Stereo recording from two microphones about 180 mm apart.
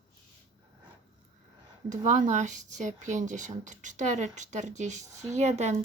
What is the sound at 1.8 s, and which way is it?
Speech, 40° right (ahead or behind).